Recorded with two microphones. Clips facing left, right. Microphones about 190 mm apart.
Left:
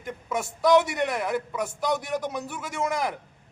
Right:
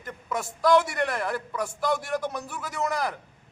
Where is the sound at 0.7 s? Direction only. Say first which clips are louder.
Left 2 dB; 20° left (ahead or behind).